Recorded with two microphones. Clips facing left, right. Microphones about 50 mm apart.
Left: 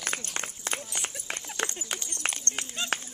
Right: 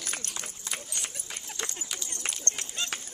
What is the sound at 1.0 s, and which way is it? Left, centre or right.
Clip-clop, left.